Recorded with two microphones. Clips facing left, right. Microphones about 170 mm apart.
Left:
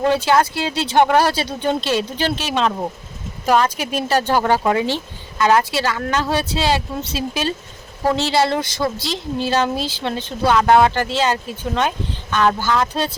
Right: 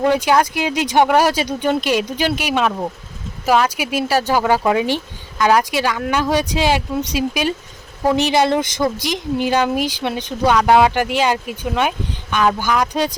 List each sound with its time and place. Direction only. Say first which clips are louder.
0.0 s speech: right 1 dB; 15° right (ahead or behind)